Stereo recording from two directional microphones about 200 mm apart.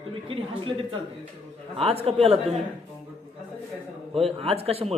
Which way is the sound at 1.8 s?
30° right (ahead or behind).